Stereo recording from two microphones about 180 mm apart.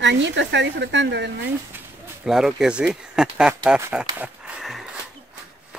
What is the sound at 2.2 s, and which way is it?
Speech, 5° right (ahead or behind).